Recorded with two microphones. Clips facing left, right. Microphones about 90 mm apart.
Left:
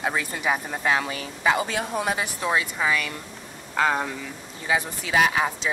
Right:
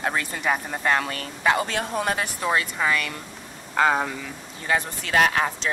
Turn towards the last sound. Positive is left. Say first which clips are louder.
# right 1 dB
turn(degrees=5)  # may be behind; listen again after turning